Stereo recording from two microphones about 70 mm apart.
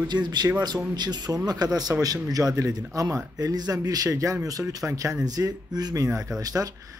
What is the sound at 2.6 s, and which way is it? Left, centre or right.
Speech, right.